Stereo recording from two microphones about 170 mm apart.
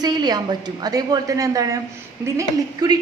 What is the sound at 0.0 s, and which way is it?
A woman's voice, 25° right (ahead or behind).